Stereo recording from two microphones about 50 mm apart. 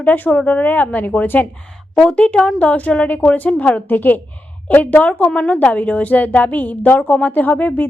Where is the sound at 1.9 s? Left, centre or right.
Centre.